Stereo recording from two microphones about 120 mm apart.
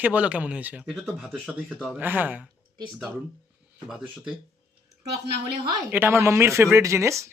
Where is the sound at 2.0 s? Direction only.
15° right (ahead or behind).